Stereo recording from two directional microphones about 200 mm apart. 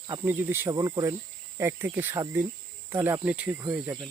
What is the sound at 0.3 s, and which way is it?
Speech, 10° right (ahead or behind).